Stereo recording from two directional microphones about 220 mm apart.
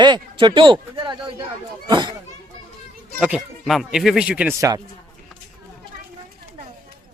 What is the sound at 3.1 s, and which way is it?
Speech, 5° right (ahead or behind).